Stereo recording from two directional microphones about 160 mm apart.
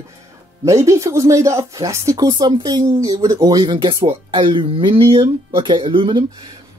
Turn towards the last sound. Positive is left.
turn(degrees=-35)  # may be behind; listen again after turning